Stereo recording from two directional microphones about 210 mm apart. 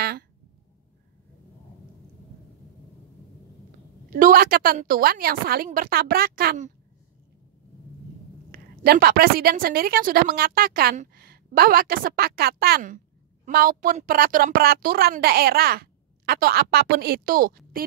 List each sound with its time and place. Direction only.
4.1 s a woman's voice: 45° right (ahead or behind)
8.5 s a woman's voice: 45° right (ahead or behind)